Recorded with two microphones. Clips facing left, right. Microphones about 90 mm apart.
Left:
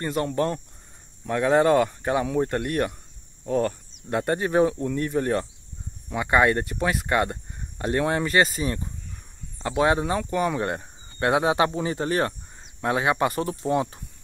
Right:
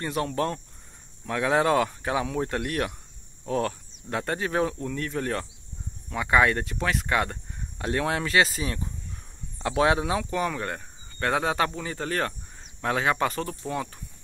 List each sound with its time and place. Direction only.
0.0 s speech: centre (ahead or behind)
10.5 s speech: 20° left (ahead or behind)